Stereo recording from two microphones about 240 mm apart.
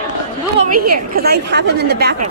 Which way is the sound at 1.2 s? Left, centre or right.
Right.